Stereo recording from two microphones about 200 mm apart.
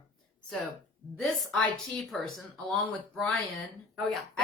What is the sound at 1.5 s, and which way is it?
Speech, 5° left (ahead or behind).